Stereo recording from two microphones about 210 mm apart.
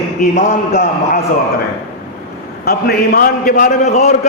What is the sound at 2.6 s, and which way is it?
A man's voice, 45° left (ahead or behind).